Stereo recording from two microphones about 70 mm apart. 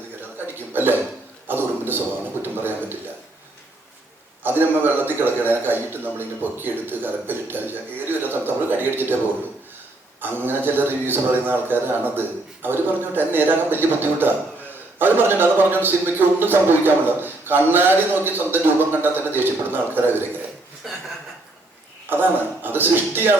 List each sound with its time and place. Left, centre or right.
0.4 s a sound: right
2.4 s a man's voice: right
4.4 s a man's voice: right
10.2 s a man's voice: right
22.1 s a man's voice: right